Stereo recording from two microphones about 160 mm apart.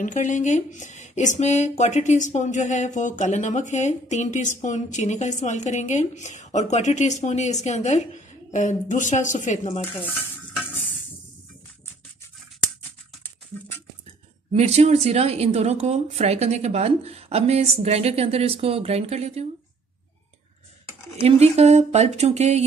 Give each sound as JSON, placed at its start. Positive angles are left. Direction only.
{"t": 0.0, "sound": "speech", "side_deg": 50}
{"t": 14.5, "sound": "a woman's voice", "side_deg": -40}
{"t": 21.2, "sound": "speech", "side_deg": -40}